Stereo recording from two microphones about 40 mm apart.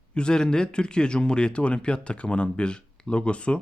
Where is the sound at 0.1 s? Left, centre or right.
Left.